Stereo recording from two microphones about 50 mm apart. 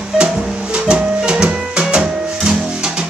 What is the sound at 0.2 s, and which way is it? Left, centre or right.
Music, right.